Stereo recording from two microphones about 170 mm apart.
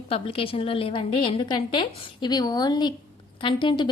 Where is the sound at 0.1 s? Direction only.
35° left (ahead or behind).